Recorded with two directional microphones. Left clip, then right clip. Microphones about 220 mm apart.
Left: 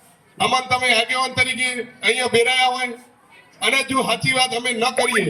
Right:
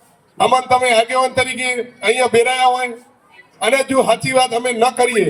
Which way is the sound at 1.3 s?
50° right (ahead or behind).